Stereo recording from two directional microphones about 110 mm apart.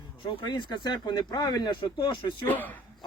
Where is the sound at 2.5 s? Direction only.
15° left (ahead or behind).